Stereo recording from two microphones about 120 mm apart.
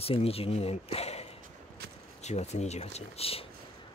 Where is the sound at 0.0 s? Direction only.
55° left (ahead or behind).